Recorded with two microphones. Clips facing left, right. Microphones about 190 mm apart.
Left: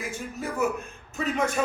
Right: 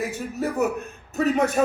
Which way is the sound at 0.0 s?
40° right (ahead or behind).